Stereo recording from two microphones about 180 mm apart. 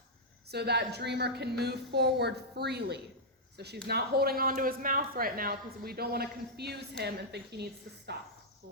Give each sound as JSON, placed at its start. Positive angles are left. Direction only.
{"t": 0.4, "sound": "speech", "side_deg": -65}